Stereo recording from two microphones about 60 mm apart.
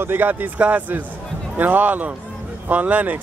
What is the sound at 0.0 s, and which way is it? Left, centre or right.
Speech, right.